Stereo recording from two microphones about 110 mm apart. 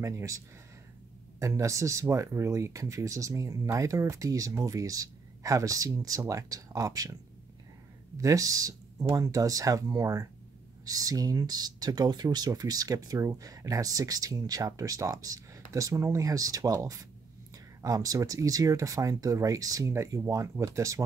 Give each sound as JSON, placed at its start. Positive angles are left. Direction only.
{"t": 0.0, "sound": "speech", "side_deg": -30}
{"t": 1.4, "sound": "speech", "side_deg": -30}
{"t": 8.2, "sound": "speech", "side_deg": -30}